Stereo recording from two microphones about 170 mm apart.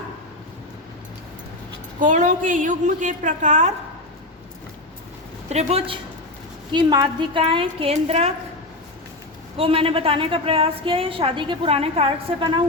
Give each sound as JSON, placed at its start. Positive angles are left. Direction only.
{"t": 2.0, "sound": "a woman's voice", "side_deg": -50}
{"t": 5.5, "sound": "a woman's voice", "side_deg": -40}
{"t": 9.6, "sound": "a woman's voice", "side_deg": -35}